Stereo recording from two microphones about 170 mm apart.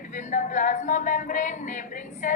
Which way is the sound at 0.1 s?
45° left (ahead or behind).